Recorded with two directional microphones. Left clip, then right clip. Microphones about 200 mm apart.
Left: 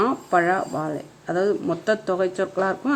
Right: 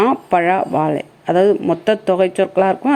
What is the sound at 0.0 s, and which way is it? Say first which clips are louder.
A woman's voice: right 6 dB; 25° right (ahead or behind).